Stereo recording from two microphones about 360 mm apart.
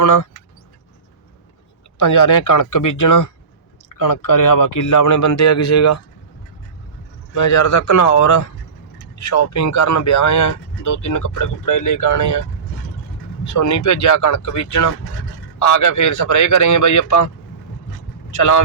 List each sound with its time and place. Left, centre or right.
0.0 s speech: left
2.0 s speech: left
7.3 s speech: left